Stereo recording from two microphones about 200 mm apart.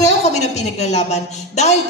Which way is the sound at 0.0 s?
35° left (ahead or behind).